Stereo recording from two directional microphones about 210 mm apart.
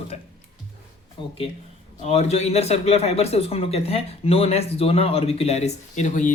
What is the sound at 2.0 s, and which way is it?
Speech, 30° left (ahead or behind).